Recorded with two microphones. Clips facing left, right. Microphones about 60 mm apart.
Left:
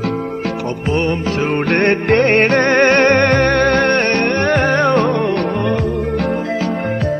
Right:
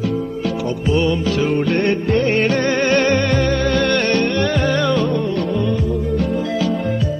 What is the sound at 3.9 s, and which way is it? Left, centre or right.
Music, left.